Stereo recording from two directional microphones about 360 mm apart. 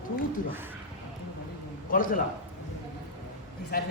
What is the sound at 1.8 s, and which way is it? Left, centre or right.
Speech, left.